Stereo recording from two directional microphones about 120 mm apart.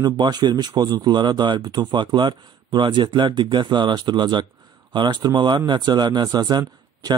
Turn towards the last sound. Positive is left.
turn(degrees=-35)  # may be behind; listen again after turning